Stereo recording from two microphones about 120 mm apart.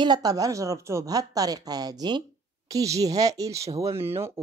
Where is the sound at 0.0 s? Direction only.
35° right (ahead or behind).